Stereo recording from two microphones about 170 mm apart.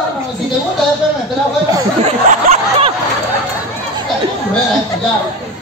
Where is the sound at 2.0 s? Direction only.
40° right (ahead or behind).